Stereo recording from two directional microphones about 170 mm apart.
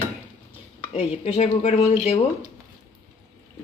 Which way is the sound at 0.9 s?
40° left (ahead or behind).